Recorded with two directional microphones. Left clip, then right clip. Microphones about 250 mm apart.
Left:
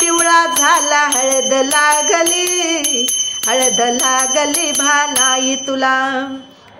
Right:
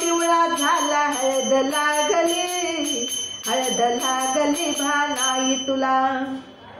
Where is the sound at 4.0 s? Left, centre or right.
Left.